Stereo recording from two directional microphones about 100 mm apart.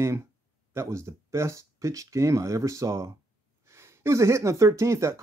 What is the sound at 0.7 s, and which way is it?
Speech, 30° right (ahead or behind).